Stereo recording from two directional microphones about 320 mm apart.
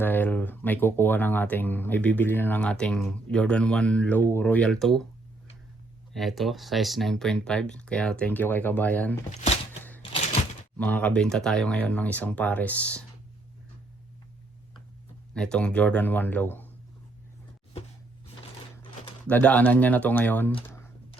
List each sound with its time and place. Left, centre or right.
0.0 s speech: centre
6.1 s speech: centre
10.0 s a sound: centre
10.8 s speech: centre
15.4 s speech: centre
19.3 s speech: centre
20.5 s computer keyboard: centre